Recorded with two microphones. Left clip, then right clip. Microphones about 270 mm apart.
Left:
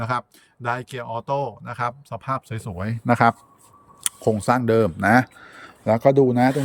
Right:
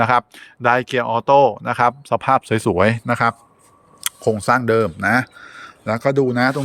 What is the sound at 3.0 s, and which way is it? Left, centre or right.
Speech, centre.